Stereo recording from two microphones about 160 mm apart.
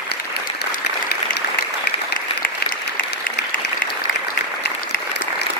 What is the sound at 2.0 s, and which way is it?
Applause, 75° left (ahead or behind).